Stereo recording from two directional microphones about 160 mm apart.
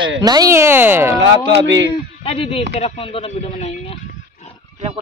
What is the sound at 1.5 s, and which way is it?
Speech, 90° right.